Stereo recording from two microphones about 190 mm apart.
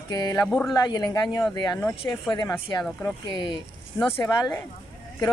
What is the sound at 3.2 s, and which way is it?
Speech, 25° left (ahead or behind).